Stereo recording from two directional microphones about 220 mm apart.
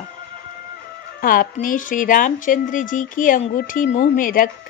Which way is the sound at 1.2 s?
40° left (ahead or behind).